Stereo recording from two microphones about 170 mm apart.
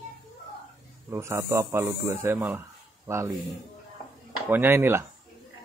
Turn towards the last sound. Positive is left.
turn(degrees=-15)  # may be behind; listen again after turning